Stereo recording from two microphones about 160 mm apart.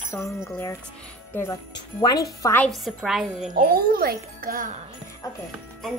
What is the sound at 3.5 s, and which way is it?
Speech, 65° right (ahead or behind).